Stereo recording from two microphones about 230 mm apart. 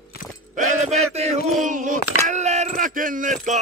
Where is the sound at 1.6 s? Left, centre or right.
Right.